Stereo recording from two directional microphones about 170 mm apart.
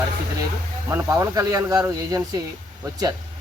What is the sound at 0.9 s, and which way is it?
Speech, 20° right (ahead or behind).